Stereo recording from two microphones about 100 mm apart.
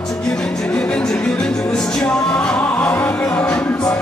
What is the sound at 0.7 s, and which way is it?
Music, 10° left (ahead or behind).